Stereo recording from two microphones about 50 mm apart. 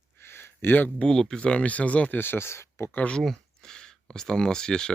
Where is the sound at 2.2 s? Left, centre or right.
Left.